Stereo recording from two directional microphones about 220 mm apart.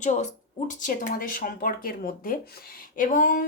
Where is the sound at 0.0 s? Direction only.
35° left (ahead or behind).